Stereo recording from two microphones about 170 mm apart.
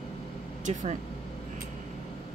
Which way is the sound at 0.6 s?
45° right (ahead or behind).